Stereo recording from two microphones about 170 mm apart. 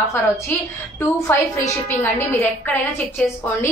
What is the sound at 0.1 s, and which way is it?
A woman's voice, 15° left (ahead or behind).